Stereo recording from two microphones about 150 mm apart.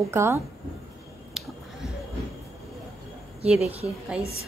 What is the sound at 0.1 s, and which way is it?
Speech, 15° right (ahead or behind).